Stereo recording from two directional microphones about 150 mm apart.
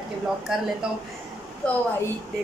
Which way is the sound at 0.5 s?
5° right (ahead or behind).